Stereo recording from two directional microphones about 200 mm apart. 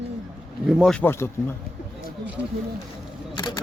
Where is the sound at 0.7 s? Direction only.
Centre (ahead or behind).